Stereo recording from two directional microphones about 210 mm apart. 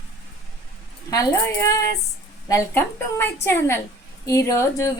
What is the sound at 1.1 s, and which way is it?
A woman's voice, 15° left (ahead or behind).